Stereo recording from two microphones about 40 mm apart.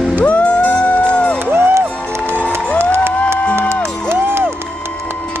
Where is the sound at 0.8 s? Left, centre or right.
Left.